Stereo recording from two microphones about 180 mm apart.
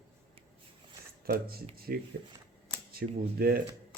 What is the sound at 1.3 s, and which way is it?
Speech, 55° right (ahead or behind).